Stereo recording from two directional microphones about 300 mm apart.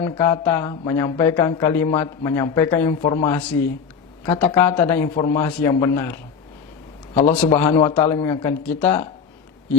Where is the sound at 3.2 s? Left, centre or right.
Centre.